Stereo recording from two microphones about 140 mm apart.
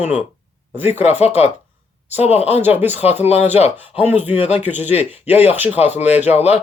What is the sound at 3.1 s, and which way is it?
Speech, 50° left (ahead or behind).